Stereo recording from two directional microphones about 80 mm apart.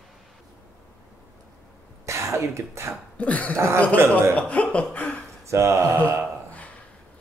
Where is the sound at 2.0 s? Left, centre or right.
Right.